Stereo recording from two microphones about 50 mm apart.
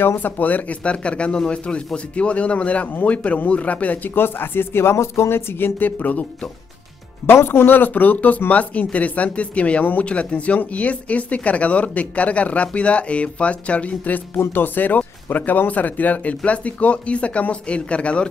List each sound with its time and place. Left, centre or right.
0.0 s speech: left
4.1 s speech: left
7.4 s speech: left